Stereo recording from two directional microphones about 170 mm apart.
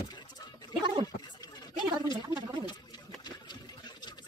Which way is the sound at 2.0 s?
25° left (ahead or behind).